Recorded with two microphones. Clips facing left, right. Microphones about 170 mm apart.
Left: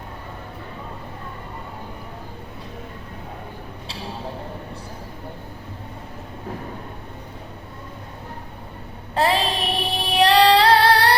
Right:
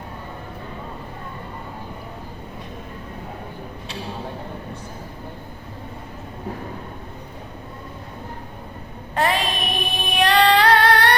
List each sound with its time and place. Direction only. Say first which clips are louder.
9.1 s female singing: left 1 dB; 30° left (ahead or behind)